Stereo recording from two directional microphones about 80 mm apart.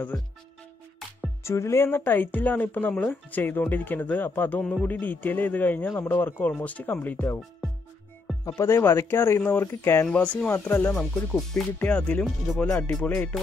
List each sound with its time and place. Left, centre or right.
1.4 s speech: left
8.5 s speech: left
10.1 s speech: centre
11.0 s speech: centre; by 13.3 s left